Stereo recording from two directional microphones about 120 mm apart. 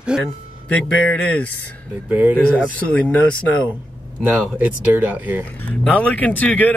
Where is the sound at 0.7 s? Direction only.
10° left (ahead or behind).